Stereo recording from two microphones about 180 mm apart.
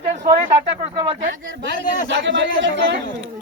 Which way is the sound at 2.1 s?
80° right.